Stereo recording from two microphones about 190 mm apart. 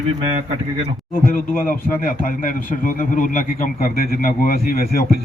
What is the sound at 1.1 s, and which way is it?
Speech, 45° left (ahead or behind).